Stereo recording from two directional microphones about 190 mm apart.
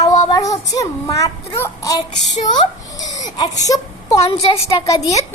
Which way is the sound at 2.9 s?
20° left (ahead or behind).